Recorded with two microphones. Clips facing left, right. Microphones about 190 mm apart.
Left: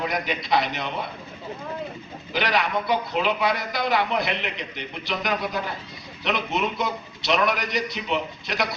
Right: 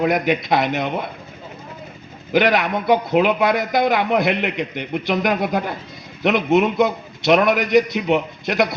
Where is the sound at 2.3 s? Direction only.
50° right (ahead or behind).